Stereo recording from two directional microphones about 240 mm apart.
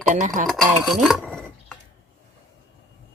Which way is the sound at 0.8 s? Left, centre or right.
Centre.